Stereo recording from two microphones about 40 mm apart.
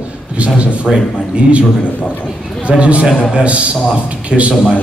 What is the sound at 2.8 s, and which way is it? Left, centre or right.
A man's voice, right.